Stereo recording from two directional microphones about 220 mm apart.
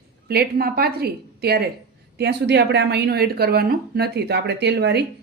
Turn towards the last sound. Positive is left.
turn(degrees=-50)  # may be behind; listen again after turning